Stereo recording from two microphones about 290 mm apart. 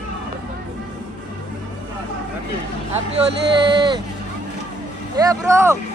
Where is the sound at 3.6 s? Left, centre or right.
Centre.